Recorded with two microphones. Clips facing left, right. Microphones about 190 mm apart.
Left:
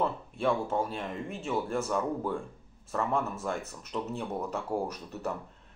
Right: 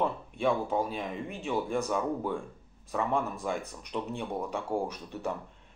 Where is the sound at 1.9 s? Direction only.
Centre (ahead or behind).